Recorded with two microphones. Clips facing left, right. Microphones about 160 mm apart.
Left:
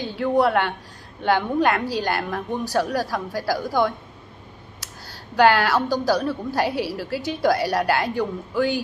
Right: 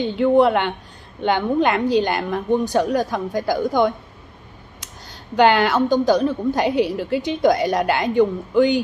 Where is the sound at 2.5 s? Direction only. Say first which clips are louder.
Right 6 dB; 20° right (ahead or behind).